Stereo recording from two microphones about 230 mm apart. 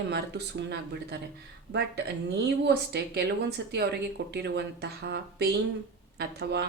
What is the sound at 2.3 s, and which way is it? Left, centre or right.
Speech, right.